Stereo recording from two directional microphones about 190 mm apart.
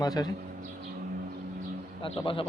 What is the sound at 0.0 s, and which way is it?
Speech, 20° left (ahead or behind).